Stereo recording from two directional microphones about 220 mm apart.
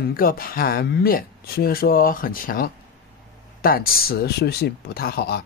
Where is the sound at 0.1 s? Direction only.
40° left (ahead or behind).